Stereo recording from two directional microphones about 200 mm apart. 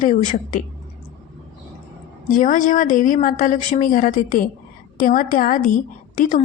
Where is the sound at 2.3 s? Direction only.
40° left (ahead or behind).